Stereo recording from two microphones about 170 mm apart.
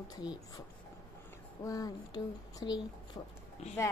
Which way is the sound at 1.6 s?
20° left (ahead or behind).